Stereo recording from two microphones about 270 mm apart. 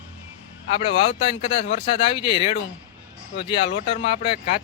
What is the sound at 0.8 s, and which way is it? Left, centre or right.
Speech, centre.